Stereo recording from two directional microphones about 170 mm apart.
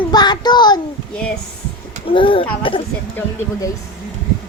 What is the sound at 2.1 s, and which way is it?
Speech, 30° left (ahead or behind).